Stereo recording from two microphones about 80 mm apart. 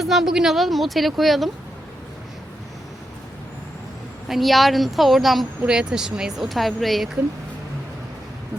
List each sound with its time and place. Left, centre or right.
0.0 s a woman's voice: centre
4.3 s a woman's voice: centre